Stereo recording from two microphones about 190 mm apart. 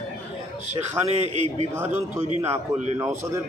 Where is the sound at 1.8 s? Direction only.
10° right (ahead or behind).